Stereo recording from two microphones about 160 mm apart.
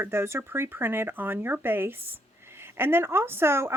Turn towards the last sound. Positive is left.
turn(degrees=-15)  # may be behind; listen again after turning